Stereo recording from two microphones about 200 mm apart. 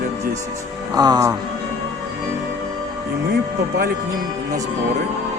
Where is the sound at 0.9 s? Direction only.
20° right (ahead or behind).